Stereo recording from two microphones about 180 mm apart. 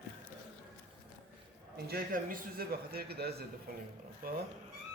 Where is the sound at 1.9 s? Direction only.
55° right (ahead or behind).